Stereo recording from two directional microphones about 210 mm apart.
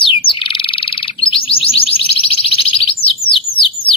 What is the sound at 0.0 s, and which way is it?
Frog, 25° left (ahead or behind).